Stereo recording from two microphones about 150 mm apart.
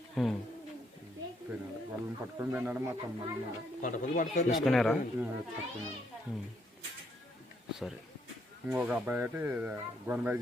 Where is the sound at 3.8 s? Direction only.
60° left (ahead or behind).